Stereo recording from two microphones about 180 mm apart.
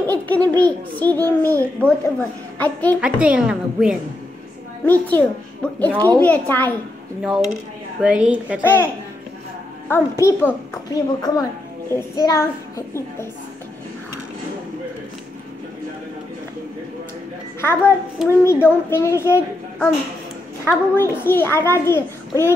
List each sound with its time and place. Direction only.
0.0 s a child's voice: 10° left (ahead or behind)
1.2 s a child's voice: 15° right (ahead or behind)
1.8 s a child's voice: 10° left (ahead or behind)
3.0 s a woman's voice: 5° right (ahead or behind)
4.8 s a child's voice: 10° left (ahead or behind)
8.0 s a woman's voice: 5° right (ahead or behind)
8.6 s a child's voice: 10° left (ahead or behind)
17.6 s a child's voice: 15° left (ahead or behind)
20.9 s a child's voice: 15° left (ahead or behind)